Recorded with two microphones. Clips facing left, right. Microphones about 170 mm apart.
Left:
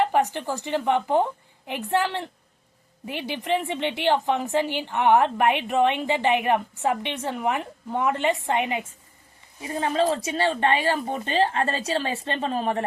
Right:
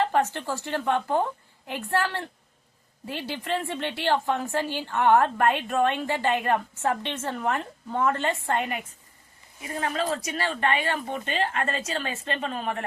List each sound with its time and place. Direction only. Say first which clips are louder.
0.0 s a woman's voice: left 2 dB; 15° left (ahead or behind); by 12.8 s 35° left (ahead or behind)